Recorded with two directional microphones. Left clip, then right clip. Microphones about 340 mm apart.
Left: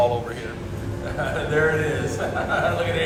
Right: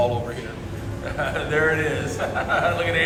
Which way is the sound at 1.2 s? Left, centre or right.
Centre.